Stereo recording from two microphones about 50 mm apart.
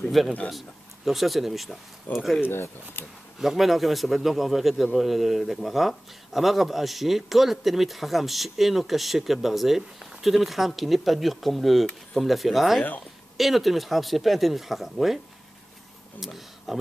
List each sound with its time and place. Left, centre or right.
0.2 s speech: centre
2.4 s speech: left
3.3 s speech: centre
16.2 s speech: centre